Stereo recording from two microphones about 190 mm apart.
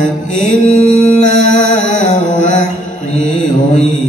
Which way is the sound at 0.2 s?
40° left (ahead or behind).